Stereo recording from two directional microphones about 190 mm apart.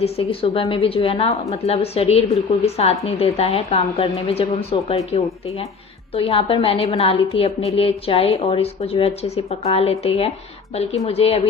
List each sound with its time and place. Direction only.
0.0 s a woman's voice: 30° left (ahead or behind)